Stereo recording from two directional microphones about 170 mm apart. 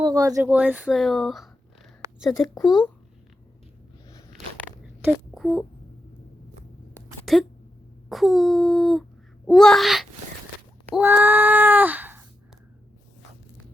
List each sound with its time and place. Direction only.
0.0 s speech: 20° right (ahead or behind)
0.4 s speech: 10° right (ahead or behind)
2.7 s speech: centre (ahead or behind)
4.8 s a sound: 5° right (ahead or behind)
7.3 s speech: centre (ahead or behind)
10.9 s a sound: 10° right (ahead or behind)